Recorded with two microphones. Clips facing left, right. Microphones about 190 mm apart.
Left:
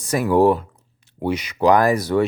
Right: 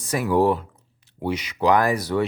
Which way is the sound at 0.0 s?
45° left (ahead or behind).